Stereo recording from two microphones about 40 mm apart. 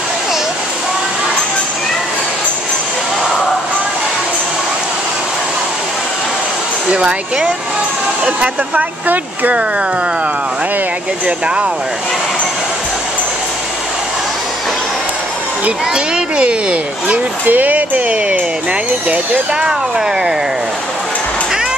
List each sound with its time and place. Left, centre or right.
6.9 s speech: right
8.3 s speech: right
11.2 s speech: right
15.9 s speech: right
17.5 s speech: right